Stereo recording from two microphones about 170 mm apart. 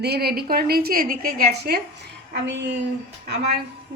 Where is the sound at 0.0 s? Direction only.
70° right (ahead or behind).